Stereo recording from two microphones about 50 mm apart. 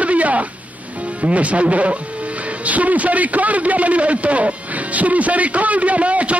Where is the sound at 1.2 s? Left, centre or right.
Right.